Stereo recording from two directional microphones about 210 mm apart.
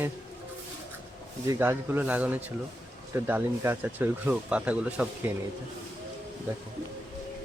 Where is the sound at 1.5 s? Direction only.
10° right (ahead or behind).